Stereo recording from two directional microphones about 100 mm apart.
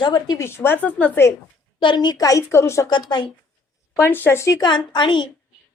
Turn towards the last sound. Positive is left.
turn(degrees=50)  # may be behind; listen again after turning